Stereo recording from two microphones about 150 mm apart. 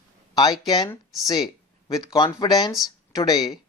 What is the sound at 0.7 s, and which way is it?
Speech, 25° left (ahead or behind).